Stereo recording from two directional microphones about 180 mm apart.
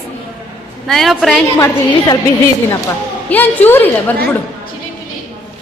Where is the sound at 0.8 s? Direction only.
Centre (ahead or behind).